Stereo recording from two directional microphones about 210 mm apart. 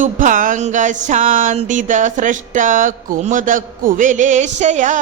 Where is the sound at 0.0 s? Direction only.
40° right (ahead or behind).